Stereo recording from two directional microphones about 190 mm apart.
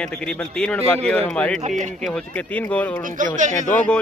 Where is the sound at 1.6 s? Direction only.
40° right (ahead or behind).